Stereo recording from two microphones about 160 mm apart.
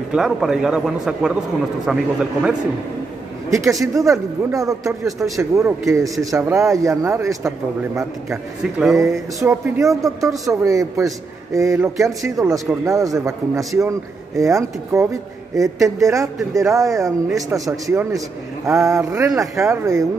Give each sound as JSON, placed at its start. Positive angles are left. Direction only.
{"t": 0.1, "sound": "a man's voice", "side_deg": -5}
{"t": 3.4, "sound": "a man's voice", "side_deg": -20}